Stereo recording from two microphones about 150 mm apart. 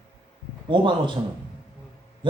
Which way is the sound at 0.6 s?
30° right (ahead or behind).